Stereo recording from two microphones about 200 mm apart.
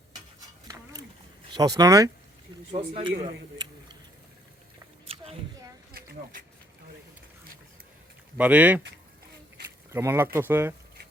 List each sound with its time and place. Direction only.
1.5 s speech: 20° right (ahead or behind)
5.0 s a sound: 30° right (ahead or behind)
8.4 s speech: 5° right (ahead or behind)
9.9 s speech: 10° right (ahead or behind)